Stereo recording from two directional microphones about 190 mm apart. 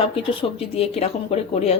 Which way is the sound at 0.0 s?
30° left (ahead or behind).